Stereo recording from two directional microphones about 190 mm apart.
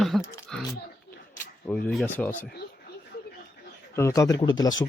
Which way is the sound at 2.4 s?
55° left (ahead or behind).